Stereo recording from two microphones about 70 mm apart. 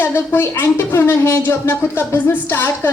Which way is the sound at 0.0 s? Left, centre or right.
Left.